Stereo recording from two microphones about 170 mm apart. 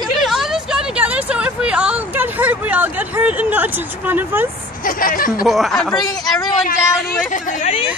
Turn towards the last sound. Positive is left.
turn(degrees=45)  # may be behind; listen again after turning